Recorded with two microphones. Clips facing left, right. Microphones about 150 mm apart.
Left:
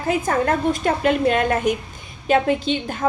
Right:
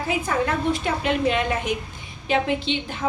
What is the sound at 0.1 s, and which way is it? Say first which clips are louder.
A woman's voice: left 5 dB; 45° left (ahead or behind).